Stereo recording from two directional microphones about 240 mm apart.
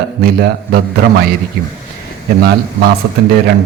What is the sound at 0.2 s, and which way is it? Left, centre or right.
Speech, right.